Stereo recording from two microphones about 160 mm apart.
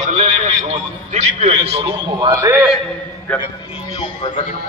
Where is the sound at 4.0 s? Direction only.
30° left (ahead or behind).